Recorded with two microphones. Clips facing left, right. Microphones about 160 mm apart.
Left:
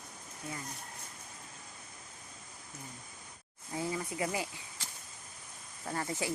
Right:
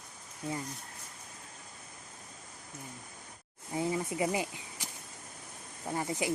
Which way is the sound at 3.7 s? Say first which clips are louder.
Right 4 dB; 20° right (ahead or behind).